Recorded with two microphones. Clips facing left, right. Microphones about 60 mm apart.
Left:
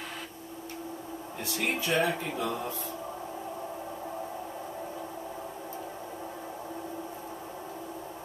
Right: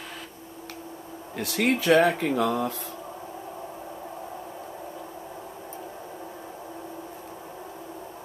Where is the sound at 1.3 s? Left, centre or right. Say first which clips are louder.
Right 7 dB; right.